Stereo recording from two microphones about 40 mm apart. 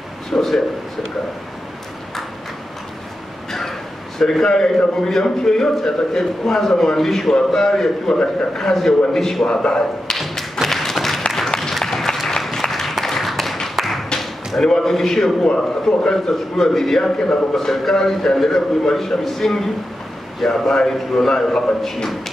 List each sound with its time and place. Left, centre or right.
0.3 s a man's voice: centre
4.2 s a man's voice: centre
9.5 s speech: left
10.1 s thump: centre
10.6 s a sound: centre
11.3 s applause: centre
13.2 s a sound: centre
13.7 s tap: centre
14.6 s a man's voice: centre
17.2 s speech: left
17.6 s a man's voice: centre